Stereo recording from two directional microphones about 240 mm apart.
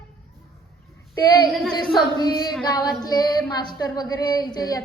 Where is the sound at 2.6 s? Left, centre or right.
Centre.